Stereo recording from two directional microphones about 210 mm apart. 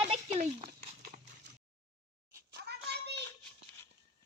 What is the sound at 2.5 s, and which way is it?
Hands, 50° right (ahead or behind).